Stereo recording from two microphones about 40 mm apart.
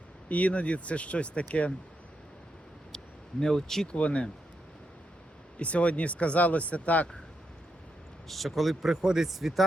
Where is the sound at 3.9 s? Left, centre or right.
Left.